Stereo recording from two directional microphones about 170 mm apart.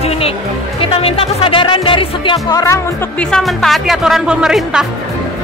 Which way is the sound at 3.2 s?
5° left (ahead or behind).